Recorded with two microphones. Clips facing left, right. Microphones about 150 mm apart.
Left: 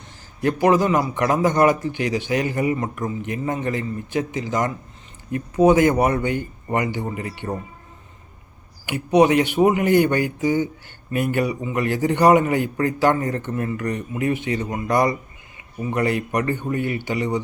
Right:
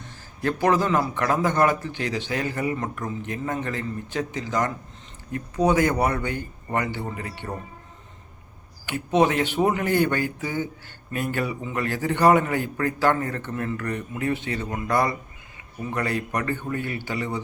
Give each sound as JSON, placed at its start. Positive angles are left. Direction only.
{"t": 0.4, "sound": "a man's voice", "side_deg": 15}
{"t": 8.9, "sound": "a man's voice", "side_deg": 15}